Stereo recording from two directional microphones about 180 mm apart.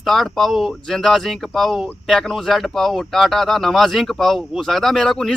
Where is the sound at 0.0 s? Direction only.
Centre (ahead or behind).